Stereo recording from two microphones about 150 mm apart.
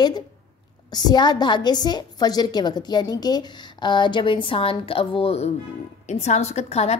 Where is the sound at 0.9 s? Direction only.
30° left (ahead or behind).